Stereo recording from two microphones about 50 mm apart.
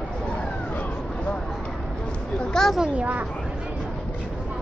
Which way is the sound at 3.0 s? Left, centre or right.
Right.